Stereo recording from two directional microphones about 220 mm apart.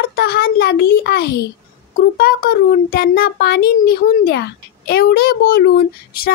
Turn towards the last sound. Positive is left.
turn(degrees=40)  # may be behind; listen again after turning